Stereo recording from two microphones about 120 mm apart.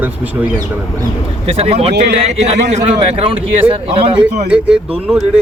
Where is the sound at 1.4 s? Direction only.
55° right (ahead or behind).